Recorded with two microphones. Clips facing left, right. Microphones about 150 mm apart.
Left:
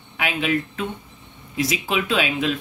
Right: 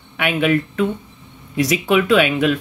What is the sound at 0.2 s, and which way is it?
Speech, 60° right (ahead or behind).